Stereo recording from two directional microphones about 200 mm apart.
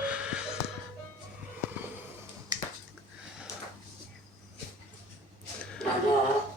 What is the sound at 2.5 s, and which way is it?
Finger snapping, 20° right (ahead or behind).